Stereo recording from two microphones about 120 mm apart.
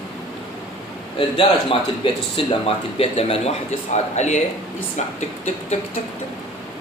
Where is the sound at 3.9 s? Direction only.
75° left (ahead or behind).